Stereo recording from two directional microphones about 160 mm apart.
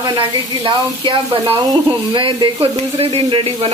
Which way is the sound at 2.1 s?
30° right (ahead or behind).